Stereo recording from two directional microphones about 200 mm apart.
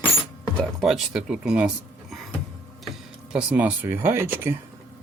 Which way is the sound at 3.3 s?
5° right (ahead or behind).